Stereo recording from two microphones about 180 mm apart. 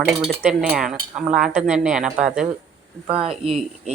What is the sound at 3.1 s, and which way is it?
Speech, 35° right (ahead or behind).